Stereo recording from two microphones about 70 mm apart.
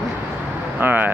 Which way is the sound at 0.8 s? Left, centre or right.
Right.